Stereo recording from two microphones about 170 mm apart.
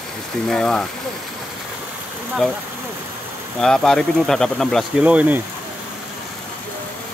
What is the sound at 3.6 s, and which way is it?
Speech, 5° left (ahead or behind).